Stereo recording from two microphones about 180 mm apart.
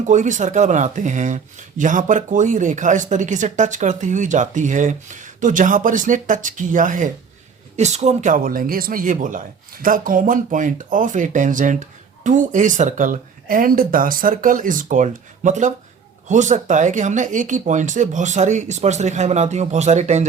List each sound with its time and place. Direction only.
0.0 s speech: 45° right (ahead or behind)